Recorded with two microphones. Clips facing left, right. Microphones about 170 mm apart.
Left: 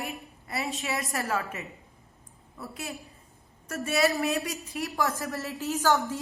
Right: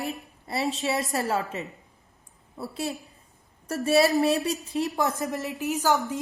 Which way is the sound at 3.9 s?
35° right (ahead or behind).